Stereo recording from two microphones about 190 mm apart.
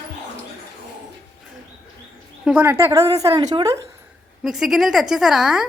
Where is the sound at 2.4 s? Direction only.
10° right (ahead or behind).